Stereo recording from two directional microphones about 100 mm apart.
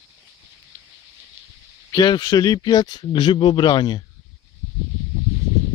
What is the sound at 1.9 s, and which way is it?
Speech, 45° left (ahead or behind).